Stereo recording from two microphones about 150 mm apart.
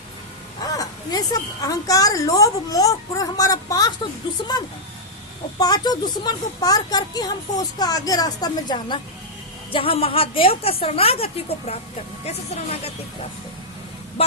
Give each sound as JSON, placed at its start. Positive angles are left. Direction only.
{"t": 0.6, "sound": "a woman's voice", "side_deg": 25}
{"t": 5.5, "sound": "a woman's voice", "side_deg": 25}